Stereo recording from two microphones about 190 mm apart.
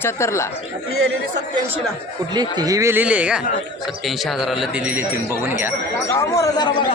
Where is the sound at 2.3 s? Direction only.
20° right (ahead or behind).